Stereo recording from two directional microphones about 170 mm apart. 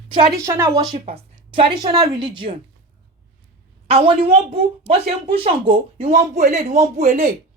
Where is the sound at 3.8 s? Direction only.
35° right (ahead or behind).